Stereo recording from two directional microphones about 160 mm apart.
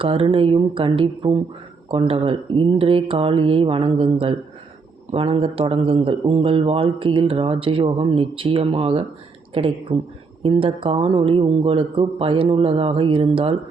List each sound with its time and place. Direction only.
0.0 s a man's voice: 35° right (ahead or behind)